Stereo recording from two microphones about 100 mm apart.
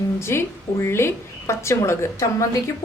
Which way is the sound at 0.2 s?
25° left (ahead or behind).